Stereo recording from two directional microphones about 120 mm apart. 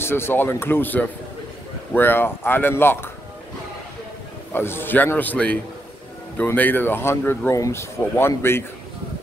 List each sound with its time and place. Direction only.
0.0 s a man's voice: 20° left (ahead or behind)
4.5 s a man's voice: 20° left (ahead or behind)